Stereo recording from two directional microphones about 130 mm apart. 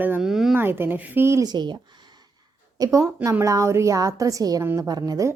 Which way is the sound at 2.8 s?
25° right (ahead or behind).